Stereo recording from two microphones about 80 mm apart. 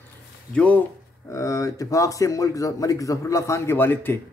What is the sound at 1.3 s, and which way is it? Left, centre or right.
Speech, left.